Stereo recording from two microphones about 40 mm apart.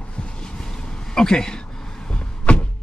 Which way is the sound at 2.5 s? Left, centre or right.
Left.